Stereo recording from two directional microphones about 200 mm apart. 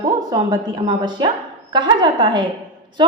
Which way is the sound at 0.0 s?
20° right (ahead or behind).